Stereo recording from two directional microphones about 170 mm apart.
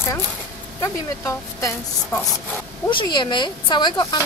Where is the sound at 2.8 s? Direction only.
30° left (ahead or behind).